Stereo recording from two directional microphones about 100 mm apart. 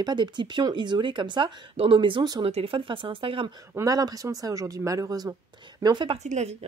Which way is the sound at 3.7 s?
40° right (ahead or behind).